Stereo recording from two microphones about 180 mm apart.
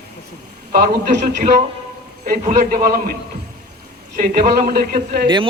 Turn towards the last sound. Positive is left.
turn(degrees=-55)  # may be behind; listen again after turning